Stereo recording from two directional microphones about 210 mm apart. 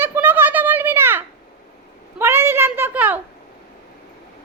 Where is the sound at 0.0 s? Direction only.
10° right (ahead or behind).